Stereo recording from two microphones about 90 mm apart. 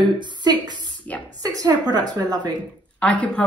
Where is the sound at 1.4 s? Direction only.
45° right (ahead or behind).